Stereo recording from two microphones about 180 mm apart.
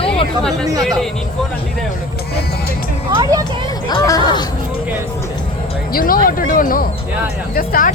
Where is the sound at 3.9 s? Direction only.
20° left (ahead or behind).